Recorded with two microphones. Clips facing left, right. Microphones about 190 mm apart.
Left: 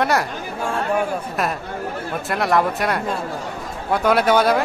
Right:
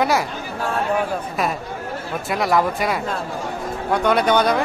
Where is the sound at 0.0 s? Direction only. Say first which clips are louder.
Even; centre (ahead or behind).